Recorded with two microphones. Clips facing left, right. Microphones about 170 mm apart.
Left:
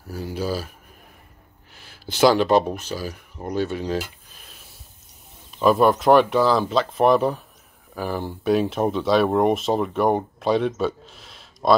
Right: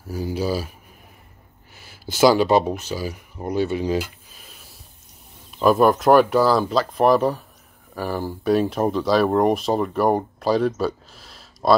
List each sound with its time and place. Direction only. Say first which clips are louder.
0.1 s speech: right 3 dB; 5° right (ahead or behind)
1.7 s speech: right 2 dB; 5° right (ahead or behind)